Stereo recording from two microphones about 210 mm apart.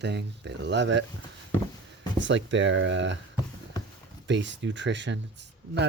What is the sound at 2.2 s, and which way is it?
Speech, 60° right (ahead or behind).